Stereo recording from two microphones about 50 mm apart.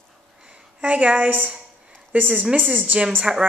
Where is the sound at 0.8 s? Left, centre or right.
Right.